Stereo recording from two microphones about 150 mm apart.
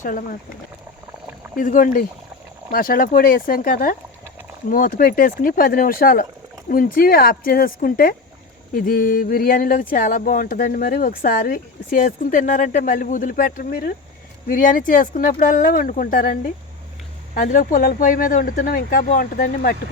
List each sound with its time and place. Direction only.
0.0 s speech: 60° left (ahead or behind)
1.5 s speech: 65° left (ahead or behind)
14.4 s speech: 65° left (ahead or behind)
17.3 s speech: 65° left (ahead or behind)